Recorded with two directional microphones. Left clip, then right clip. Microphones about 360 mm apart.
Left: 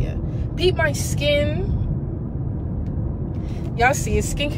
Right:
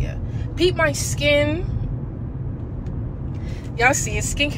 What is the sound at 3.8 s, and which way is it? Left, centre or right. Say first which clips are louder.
Speech: even; centre.